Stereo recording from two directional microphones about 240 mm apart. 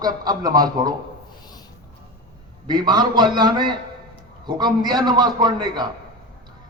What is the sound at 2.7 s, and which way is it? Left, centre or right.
A man's voice, centre.